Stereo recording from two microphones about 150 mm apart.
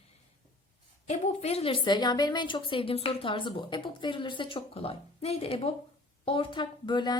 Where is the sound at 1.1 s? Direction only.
45° left (ahead or behind).